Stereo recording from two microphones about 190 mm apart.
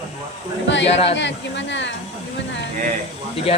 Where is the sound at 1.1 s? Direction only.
70° left (ahead or behind).